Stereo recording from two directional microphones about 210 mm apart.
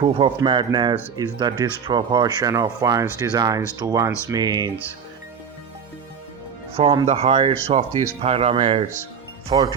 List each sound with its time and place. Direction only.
0.0 s speech: 25° right (ahead or behind)
6.7 s speech: 25° right (ahead or behind)